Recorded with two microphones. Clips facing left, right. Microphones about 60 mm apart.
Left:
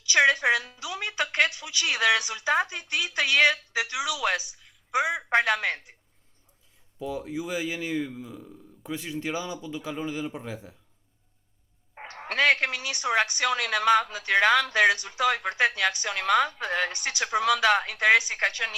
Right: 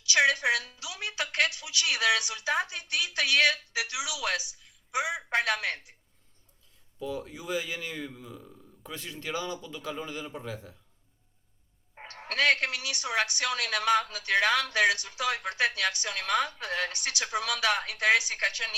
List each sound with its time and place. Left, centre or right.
0.1 s speech: left
7.0 s a man's voice: centre
11.9 s speech: left